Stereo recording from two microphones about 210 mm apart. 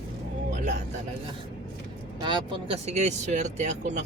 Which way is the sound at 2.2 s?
25° right (ahead or behind).